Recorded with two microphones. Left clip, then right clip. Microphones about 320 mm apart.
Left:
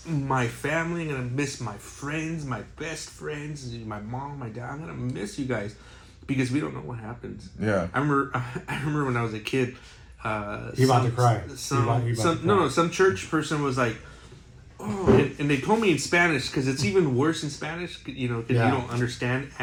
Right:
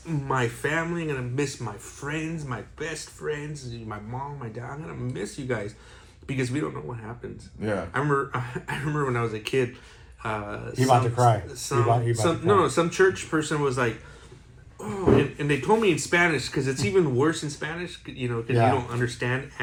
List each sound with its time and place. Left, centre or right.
0.3 s speech: centre
7.6 s speech: left
7.9 s speech: centre
10.8 s speech: right
11.4 s speech: centre